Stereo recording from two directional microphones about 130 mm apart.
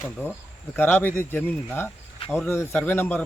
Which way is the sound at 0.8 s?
15° left (ahead or behind).